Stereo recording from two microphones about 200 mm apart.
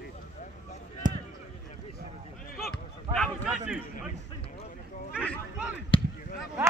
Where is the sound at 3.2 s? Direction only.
5° right (ahead or behind).